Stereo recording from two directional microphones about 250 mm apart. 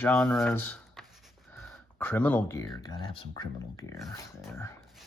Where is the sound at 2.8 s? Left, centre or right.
Centre.